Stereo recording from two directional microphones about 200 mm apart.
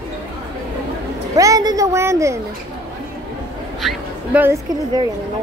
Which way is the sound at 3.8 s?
5° right (ahead or behind).